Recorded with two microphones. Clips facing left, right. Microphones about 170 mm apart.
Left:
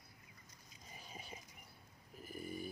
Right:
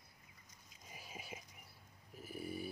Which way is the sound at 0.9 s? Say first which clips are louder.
Right 2 dB; 5° right (ahead or behind).